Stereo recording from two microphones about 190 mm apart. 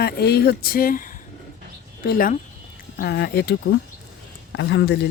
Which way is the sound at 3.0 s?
60° left (ahead or behind).